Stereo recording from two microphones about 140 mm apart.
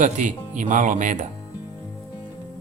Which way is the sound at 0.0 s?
65° right (ahead or behind).